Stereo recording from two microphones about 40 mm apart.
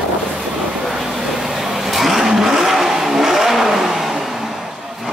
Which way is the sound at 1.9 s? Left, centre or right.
Centre.